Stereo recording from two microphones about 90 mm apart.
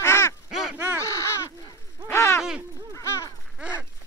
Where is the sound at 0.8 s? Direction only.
25° right (ahead or behind).